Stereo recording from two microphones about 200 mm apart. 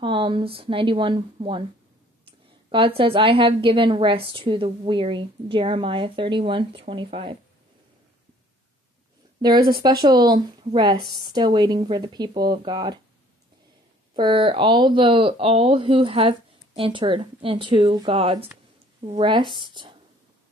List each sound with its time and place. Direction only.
0.0 s speech: 25° right (ahead or behind)
2.7 s speech: 25° right (ahead or behind)
9.6 s speech: 50° right (ahead or behind)
9.8 s speech: 20° right (ahead or behind)
14.1 s speech: 25° right (ahead or behind)